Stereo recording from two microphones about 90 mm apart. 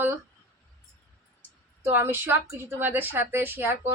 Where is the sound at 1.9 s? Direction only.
20° right (ahead or behind).